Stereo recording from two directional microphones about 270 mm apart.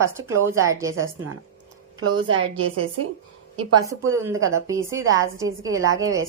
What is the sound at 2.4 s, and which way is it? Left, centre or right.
Speech, right.